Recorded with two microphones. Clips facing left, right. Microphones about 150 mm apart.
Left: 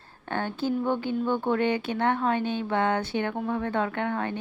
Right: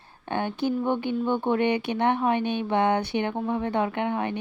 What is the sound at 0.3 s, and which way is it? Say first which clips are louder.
Speech: right 2 dB; 15° right (ahead or behind).